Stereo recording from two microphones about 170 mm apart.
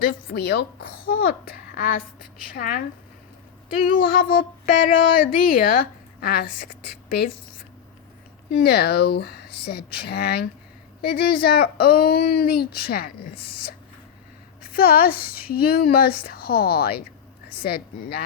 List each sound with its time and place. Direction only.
0.0 s speech: 65° left (ahead or behind)
3.8 s speech: 55° left (ahead or behind)
8.6 s a woman's voice: 70° left (ahead or behind)